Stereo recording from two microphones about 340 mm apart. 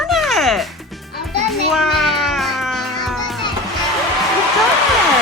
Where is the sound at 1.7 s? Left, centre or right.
Centre.